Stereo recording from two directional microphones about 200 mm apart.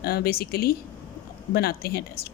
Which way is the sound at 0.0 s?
50° left (ahead or behind).